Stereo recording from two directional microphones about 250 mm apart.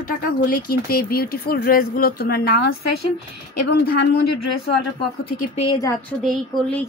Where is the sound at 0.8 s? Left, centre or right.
Left.